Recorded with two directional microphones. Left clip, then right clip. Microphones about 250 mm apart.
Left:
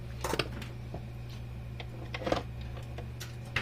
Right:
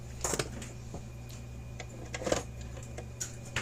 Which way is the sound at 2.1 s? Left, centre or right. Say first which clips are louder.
Even; centre.